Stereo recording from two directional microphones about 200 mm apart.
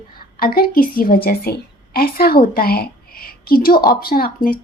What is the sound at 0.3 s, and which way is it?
A woman's voice, 50° left (ahead or behind).